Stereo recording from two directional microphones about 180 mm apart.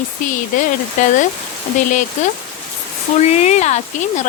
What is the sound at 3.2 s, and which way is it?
Speech, 40° left (ahead or behind).